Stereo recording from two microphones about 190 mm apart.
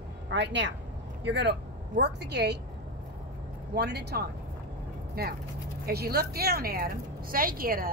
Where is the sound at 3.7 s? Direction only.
60° right (ahead or behind).